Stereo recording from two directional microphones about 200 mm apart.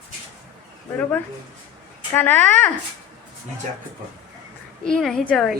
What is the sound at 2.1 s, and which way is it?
Speech, 10° left (ahead or behind).